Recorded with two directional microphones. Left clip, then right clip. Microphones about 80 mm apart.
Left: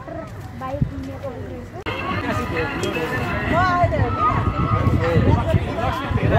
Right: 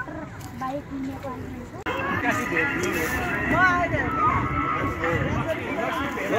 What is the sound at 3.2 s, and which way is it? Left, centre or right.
Speech, centre.